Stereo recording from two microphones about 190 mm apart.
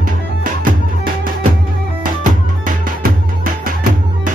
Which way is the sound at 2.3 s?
45° right (ahead or behind).